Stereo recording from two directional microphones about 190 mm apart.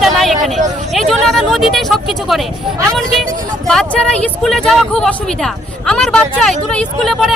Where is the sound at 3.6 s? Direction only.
5° left (ahead or behind).